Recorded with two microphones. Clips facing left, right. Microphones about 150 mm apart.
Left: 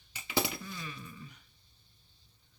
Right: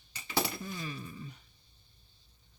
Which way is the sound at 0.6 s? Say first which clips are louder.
Right 4 dB; 30° right (ahead or behind).